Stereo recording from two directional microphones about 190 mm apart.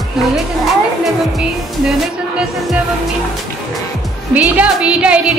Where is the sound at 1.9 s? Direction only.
5° right (ahead or behind).